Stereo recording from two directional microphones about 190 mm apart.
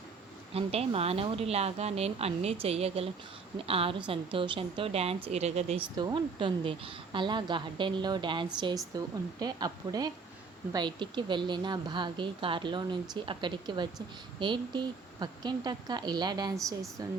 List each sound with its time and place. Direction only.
0.5 s a woman's voice: 30° right (ahead or behind)